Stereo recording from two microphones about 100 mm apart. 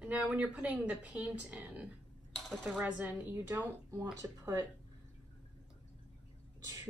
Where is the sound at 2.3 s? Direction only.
5° left (ahead or behind).